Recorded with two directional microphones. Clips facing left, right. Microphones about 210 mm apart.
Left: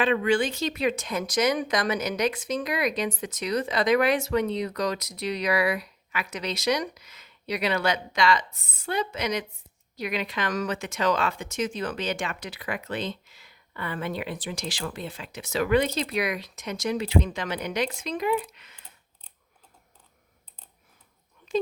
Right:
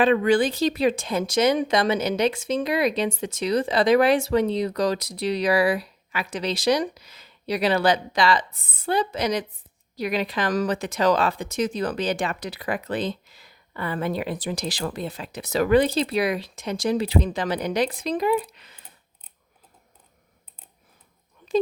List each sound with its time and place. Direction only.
0.0 s speech: 40° right (ahead or behind)
8.5 s speech: 55° right (ahead or behind)
8.8 s speech: 35° right (ahead or behind)